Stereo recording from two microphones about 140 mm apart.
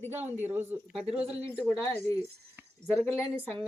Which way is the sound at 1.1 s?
45° right (ahead or behind).